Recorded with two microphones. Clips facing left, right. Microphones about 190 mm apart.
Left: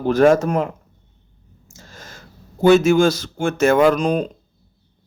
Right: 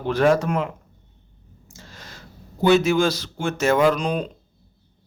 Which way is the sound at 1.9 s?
45° left (ahead or behind).